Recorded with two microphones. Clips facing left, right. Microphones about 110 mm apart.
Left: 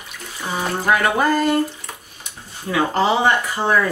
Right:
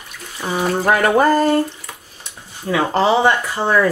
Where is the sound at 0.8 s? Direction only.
40° right (ahead or behind).